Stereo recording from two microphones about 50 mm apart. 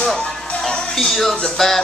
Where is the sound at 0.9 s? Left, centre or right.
Centre.